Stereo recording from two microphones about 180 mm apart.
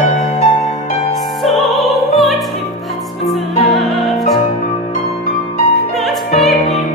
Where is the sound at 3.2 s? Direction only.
Centre (ahead or behind).